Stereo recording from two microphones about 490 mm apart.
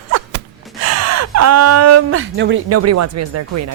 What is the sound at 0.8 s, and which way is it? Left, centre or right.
Speech, right.